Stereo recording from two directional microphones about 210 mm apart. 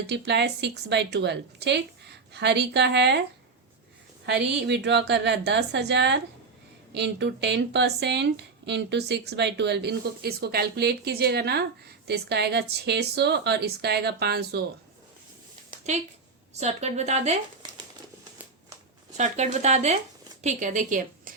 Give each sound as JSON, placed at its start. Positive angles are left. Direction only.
{"t": 0.1, "sound": "speech", "side_deg": -55}
{"t": 4.3, "sound": "a woman's voice", "side_deg": -55}
{"t": 15.9, "sound": "speech", "side_deg": -35}
{"t": 19.1, "sound": "speech", "side_deg": -30}